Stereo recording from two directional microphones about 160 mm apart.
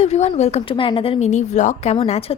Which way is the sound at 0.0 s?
40° left (ahead or behind).